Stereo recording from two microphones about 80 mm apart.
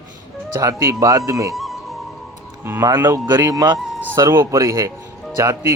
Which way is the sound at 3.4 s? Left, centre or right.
Right.